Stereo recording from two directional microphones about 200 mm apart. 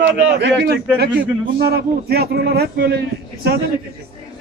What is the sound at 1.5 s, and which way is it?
A man's voice, 50° right (ahead or behind).